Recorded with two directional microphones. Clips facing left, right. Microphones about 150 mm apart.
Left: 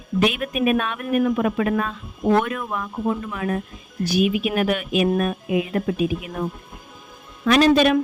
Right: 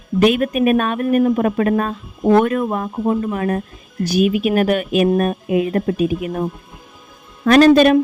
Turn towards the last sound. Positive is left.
turn(degrees=-40)  # may be behind; listen again after turning